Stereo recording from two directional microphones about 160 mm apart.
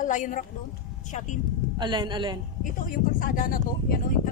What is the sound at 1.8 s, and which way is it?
Speech, 30° right (ahead or behind).